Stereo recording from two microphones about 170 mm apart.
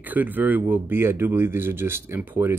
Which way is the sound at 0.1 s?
10° right (ahead or behind).